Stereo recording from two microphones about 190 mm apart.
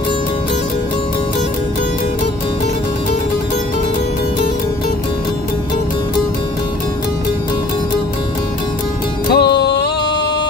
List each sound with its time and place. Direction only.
9.3 s music: 65° left (ahead or behind)